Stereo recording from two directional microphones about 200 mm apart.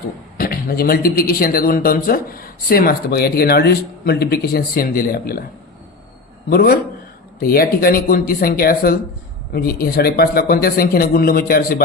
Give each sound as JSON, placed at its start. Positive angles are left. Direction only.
{"t": 0.3, "sound": "speech", "side_deg": 45}
{"t": 6.5, "sound": "speech", "side_deg": 50}